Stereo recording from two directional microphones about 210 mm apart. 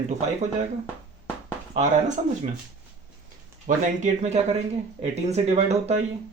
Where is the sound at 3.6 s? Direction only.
35° right (ahead or behind).